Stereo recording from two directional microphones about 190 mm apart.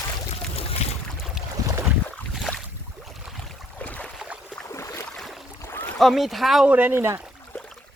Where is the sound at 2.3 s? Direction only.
Centre (ahead or behind).